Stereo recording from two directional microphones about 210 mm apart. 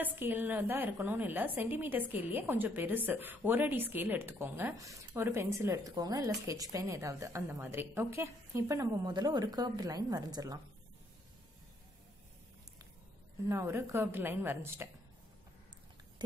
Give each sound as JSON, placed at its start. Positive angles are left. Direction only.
{"t": 0.0, "sound": "a woman's voice", "side_deg": -10}
{"t": 13.5, "sound": "a woman's voice", "side_deg": -15}
{"t": 16.2, "sound": "a sound", "side_deg": -20}